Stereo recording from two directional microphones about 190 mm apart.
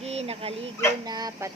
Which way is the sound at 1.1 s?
20° right (ahead or behind).